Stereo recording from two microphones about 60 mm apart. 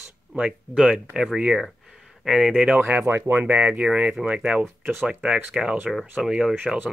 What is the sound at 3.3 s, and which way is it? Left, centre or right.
Speech, right.